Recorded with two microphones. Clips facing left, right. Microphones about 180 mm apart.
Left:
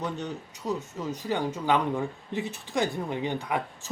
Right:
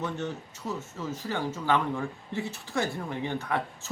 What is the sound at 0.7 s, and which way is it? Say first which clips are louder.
Speech: left 3 dB; 15° left (ahead or behind).